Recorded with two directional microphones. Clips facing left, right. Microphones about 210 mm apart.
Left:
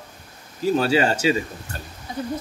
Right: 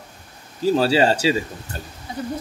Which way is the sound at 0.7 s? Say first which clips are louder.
Right 2 dB; 30° right (ahead or behind).